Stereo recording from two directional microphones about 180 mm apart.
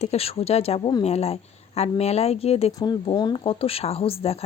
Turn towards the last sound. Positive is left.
turn(degrees=35)  # may be behind; listen again after turning